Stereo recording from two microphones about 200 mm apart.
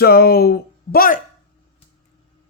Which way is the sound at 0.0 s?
50° left (ahead or behind).